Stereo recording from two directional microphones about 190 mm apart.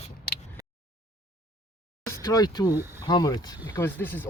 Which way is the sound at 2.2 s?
20° left (ahead or behind).